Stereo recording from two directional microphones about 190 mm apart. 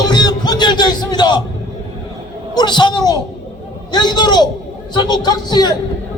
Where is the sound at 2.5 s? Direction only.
25° left (ahead or behind).